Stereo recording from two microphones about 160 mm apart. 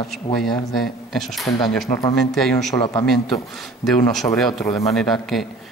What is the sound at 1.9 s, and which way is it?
Speech, 30° left (ahead or behind).